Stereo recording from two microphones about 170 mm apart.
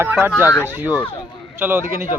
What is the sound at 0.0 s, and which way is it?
Speech, 15° right (ahead or behind).